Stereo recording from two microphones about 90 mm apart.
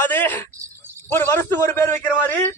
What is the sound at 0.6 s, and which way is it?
Cricket, 25° right (ahead or behind).